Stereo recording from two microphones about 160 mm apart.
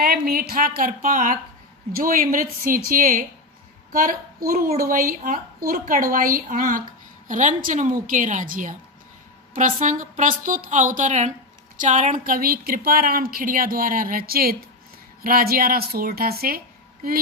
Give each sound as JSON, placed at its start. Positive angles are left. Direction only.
{"t": 0.0, "sound": "a woman's voice", "side_deg": -70}